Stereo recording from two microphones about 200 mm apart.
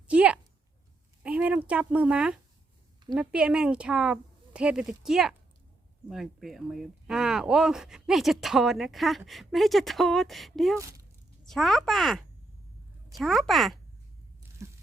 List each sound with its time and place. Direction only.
0.1 s a sound: 5° right (ahead or behind)
1.2 s speech: 5° right (ahead or behind)
10.8 s speech: 15° right (ahead or behind)
11.4 s speech: centre (ahead or behind)